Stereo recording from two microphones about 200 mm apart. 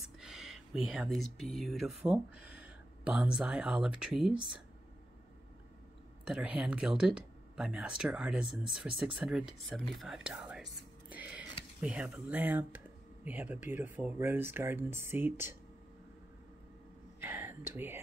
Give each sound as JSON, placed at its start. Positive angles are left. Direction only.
{"t": 0.0, "sound": "speech", "side_deg": -5}
{"t": 6.2, "sound": "speech", "side_deg": -5}
{"t": 17.2, "sound": "whispering", "side_deg": -10}